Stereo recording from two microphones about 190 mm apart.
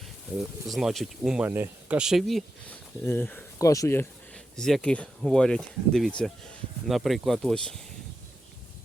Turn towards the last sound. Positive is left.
turn(degrees=5)  # may be behind; listen again after turning